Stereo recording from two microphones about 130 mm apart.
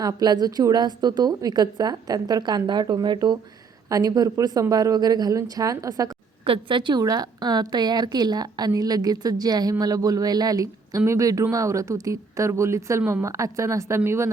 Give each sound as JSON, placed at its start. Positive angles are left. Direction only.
{"t": 0.0, "sound": "a woman's voice", "side_deg": -30}
{"t": 6.4, "sound": "a woman's voice", "side_deg": -40}